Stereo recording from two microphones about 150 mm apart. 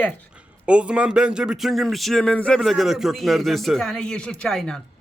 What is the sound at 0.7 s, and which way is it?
Speech, 5° right (ahead or behind).